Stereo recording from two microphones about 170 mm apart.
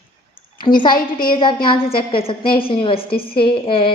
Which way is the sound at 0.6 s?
25° left (ahead or behind).